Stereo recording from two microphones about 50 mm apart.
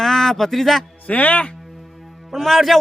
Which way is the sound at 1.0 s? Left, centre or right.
Left.